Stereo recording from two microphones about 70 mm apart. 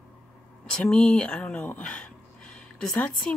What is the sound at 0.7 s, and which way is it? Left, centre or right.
Speech, centre.